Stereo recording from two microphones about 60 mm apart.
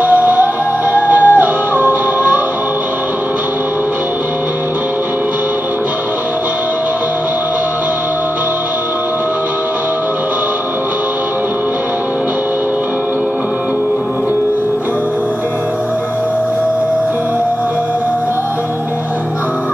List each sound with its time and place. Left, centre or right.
0.0 s music: right